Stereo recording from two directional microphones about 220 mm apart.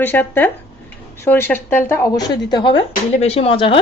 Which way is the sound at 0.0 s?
10° left (ahead or behind).